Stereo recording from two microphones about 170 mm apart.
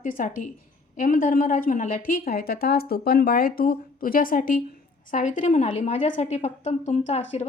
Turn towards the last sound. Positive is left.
turn(degrees=40)  # may be behind; listen again after turning